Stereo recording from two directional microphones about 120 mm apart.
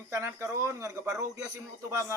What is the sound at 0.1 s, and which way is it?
A man's voice, 25° right (ahead or behind).